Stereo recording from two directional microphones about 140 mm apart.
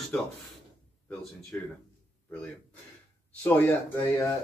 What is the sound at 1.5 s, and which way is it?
Speech, 10° left (ahead or behind).